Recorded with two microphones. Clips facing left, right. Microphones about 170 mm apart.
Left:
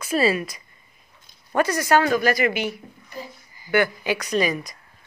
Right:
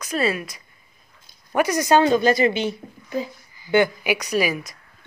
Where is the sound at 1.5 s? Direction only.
15° right (ahead or behind).